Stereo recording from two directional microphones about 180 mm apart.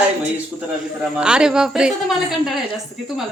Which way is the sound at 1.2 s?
5° right (ahead or behind).